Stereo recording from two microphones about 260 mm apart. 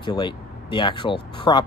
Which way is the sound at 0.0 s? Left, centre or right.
Centre.